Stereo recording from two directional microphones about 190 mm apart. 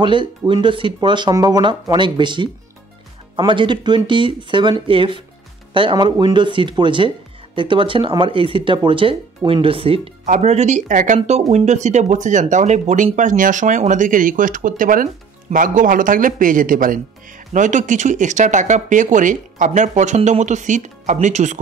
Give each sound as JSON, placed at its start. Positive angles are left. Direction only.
{"t": 0.0, "sound": "speech", "side_deg": -25}
{"t": 10.2, "sound": "speech", "side_deg": -40}